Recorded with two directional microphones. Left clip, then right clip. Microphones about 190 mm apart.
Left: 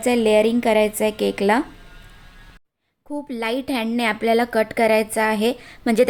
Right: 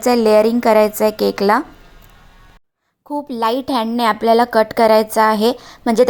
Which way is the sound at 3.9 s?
10° left (ahead or behind).